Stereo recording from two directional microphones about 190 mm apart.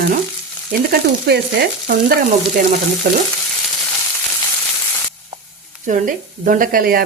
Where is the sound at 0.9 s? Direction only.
60° right (ahead or behind).